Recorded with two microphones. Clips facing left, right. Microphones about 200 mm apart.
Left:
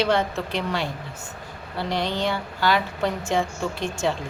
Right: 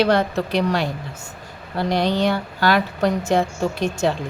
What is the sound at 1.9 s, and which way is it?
A woman's voice, 40° right (ahead or behind).